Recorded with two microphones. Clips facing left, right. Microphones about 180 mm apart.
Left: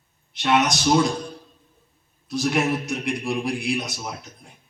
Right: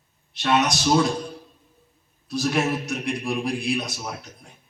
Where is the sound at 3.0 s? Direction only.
25° left (ahead or behind).